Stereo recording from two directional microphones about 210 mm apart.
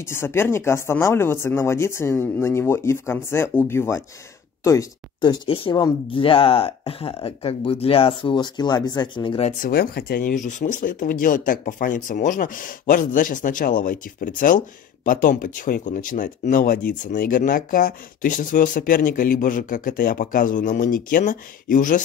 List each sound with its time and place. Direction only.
0.0 s speech: 10° left (ahead or behind); by 22.0 s 40° left (ahead or behind)